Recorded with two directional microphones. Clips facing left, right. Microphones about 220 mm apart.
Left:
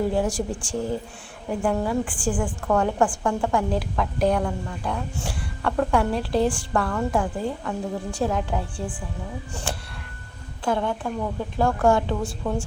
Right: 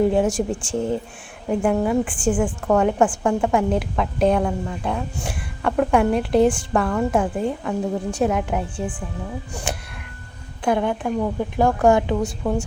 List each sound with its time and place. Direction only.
0.0 s a woman's voice: 20° right (ahead or behind)
10.6 s a woman's voice: 15° right (ahead or behind)